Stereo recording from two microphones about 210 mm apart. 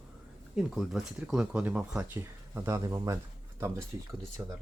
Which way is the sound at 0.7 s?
Centre (ahead or behind).